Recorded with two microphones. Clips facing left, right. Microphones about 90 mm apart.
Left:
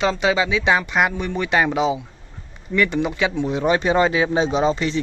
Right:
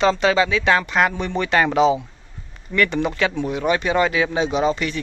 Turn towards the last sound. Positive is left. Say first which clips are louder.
# left 1 dB
turn(degrees=25)  # may be behind; listen again after turning